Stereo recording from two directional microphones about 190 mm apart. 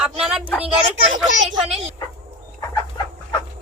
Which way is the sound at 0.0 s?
5° right (ahead or behind).